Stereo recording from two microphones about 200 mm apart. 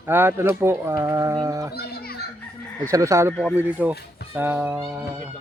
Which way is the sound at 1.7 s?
50° left (ahead or behind).